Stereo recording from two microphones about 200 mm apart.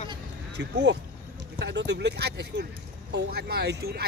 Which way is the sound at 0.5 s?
60° right (ahead or behind).